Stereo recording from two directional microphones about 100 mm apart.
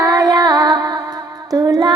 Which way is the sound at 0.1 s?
40° right (ahead or behind).